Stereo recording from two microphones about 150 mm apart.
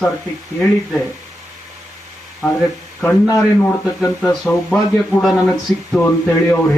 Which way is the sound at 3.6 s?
20° left (ahead or behind).